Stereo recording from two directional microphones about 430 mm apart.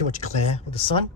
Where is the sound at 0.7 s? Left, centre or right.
Centre.